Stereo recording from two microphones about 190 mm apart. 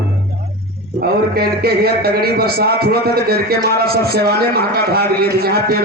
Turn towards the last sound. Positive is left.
turn(degrees=-55)  # may be behind; listen again after turning